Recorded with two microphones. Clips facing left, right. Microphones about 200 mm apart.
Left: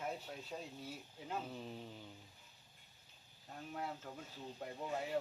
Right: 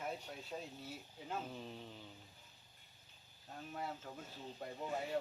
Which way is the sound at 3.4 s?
Centre (ahead or behind).